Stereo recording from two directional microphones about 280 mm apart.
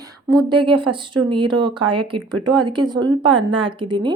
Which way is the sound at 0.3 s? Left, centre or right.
Centre.